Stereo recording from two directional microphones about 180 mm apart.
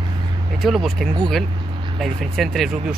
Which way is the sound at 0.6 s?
Centre (ahead or behind).